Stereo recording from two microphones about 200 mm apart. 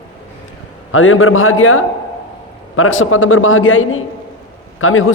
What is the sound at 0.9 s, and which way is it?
A man's voice, 85° left.